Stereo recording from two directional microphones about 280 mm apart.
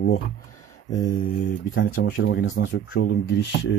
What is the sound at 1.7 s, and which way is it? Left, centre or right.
Speech, left.